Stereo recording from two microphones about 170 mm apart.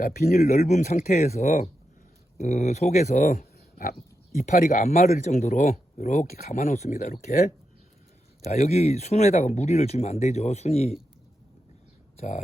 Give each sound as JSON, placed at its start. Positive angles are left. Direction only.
{"t": 0.0, "sound": "speech", "side_deg": 50}
{"t": 6.1, "sound": "speech", "side_deg": 40}
{"t": 12.1, "sound": "a sound", "side_deg": 40}